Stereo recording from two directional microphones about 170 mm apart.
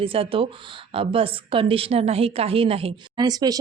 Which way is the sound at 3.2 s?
25° right (ahead or behind).